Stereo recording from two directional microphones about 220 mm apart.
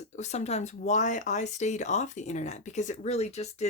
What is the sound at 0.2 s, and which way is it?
Speech, 30° left (ahead or behind).